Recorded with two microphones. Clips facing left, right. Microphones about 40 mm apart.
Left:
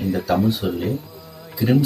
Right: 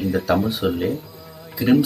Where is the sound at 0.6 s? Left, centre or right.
Centre.